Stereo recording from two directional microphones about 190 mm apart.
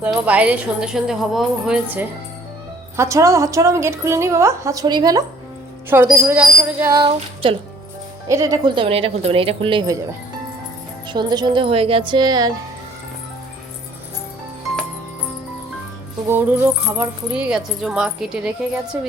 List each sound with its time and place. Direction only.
0.0 s a woman's voice: 5° right (ahead or behind); by 10.0 s 25° right (ahead or behind)
11.1 s speech: 20° right (ahead or behind)
16.3 s a woman's voice: 10° right (ahead or behind)